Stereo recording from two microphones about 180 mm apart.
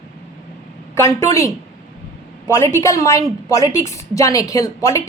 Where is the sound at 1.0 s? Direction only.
15° left (ahead or behind).